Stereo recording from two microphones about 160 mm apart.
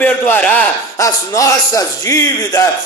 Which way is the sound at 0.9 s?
20° left (ahead or behind).